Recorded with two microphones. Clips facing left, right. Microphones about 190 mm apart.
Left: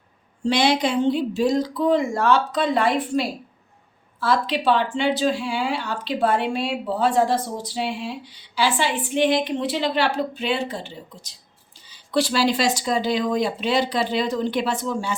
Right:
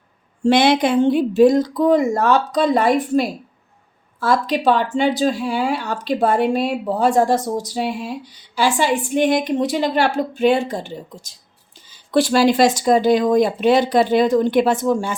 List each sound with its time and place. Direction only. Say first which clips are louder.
0.4 s speech: right 5 dB; 55° right (ahead or behind)